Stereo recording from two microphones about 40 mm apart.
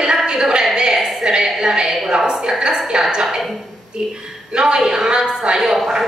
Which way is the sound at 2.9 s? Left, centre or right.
Right.